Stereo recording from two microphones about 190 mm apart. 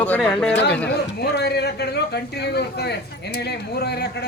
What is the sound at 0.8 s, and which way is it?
Speech, 60° left (ahead or behind).